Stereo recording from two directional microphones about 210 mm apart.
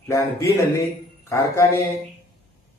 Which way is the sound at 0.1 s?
15° left (ahead or behind).